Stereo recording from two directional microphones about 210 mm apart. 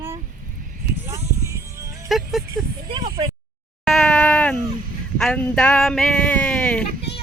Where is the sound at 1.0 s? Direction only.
15° right (ahead or behind).